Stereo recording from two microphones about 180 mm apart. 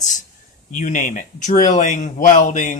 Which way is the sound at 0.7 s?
45° left (ahead or behind).